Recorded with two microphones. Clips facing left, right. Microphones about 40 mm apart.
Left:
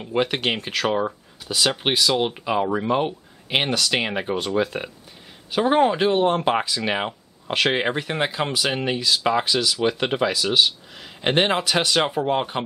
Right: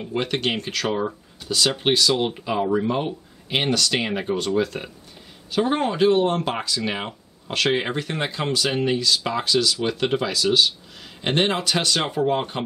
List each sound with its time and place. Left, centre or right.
0.1 s speech: centre